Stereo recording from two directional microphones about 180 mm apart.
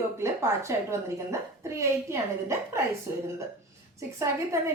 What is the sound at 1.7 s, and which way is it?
A woman's voice, 15° right (ahead or behind).